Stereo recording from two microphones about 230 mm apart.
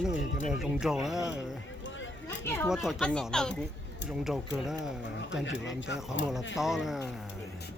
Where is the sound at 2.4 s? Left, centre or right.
Centre.